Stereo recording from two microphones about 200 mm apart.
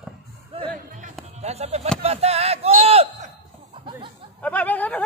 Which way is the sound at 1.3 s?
35° right (ahead or behind).